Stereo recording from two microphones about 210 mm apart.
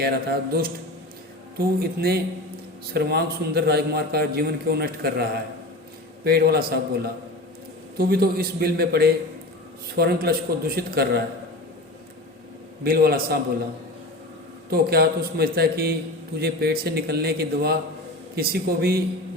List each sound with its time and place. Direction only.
0.0 s a man's voice: 50° right (ahead or behind)
6.2 s a man's voice: 50° right (ahead or behind)
12.8 s a man's voice: 45° right (ahead or behind)
14.7 s a man's voice: 50° right (ahead or behind)